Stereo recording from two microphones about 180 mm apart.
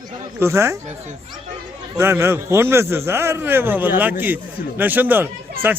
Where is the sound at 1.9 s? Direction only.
15° right (ahead or behind).